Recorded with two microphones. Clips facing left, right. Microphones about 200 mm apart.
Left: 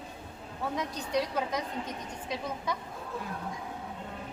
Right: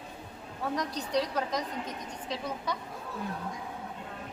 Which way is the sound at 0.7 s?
10° left (ahead or behind).